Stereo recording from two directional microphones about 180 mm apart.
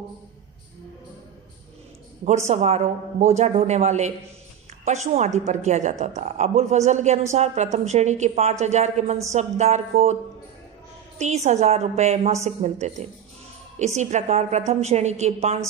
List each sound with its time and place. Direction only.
2.2 s a woman's voice: 35° right (ahead or behind)
11.1 s a woman's voice: 40° right (ahead or behind)